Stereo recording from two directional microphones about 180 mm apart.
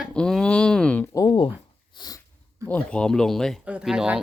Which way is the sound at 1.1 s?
25° left (ahead or behind).